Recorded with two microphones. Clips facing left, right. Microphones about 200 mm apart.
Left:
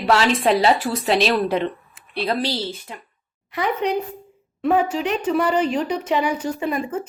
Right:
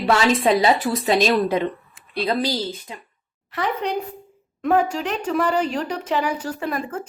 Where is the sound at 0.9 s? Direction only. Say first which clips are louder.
Right 1 dB; 40° right (ahead or behind).